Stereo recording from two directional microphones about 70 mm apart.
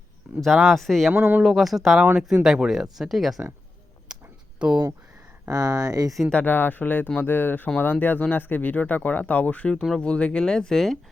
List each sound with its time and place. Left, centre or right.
0.3 s speech: centre
1.1 s speech: right
1.5 s speech: centre
4.1 s a sound: centre
4.6 s speech: centre
5.5 s speech: right
6.3 s speech: left; by 10.9 s centre